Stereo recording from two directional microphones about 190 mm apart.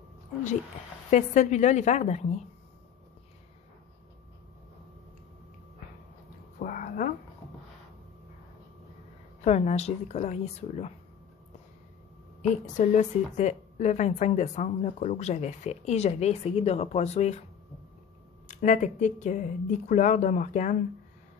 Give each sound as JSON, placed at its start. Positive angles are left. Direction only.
{"t": 1.1, "sound": "a woman's voice", "side_deg": 40}
{"t": 6.6, "sound": "a sound", "side_deg": 45}
{"t": 9.4, "sound": "a woman's voice", "side_deg": 35}
{"t": 12.4, "sound": "a woman's voice", "side_deg": 40}
{"t": 18.5, "sound": "a woman's voice", "side_deg": 40}